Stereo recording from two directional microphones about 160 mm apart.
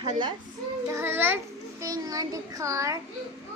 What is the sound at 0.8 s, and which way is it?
A child's voice, 15° right (ahead or behind).